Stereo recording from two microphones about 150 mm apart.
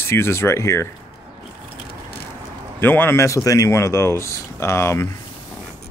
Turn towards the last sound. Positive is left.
turn(degrees=20)  # may be behind; listen again after turning